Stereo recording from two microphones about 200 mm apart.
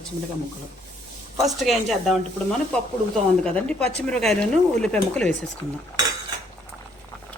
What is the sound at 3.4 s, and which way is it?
Speech, 5° left (ahead or behind).